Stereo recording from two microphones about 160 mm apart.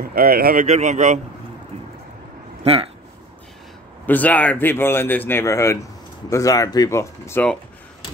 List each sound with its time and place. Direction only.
0.0 s speech: 70° right (ahead or behind)
0.7 s speech: 50° right (ahead or behind)
4.0 s speech: 10° left (ahead or behind)